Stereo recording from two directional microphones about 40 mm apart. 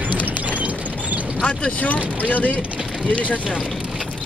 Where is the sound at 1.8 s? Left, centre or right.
Left.